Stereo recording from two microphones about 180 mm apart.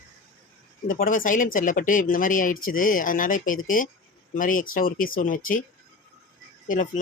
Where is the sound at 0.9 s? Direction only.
50° left (ahead or behind).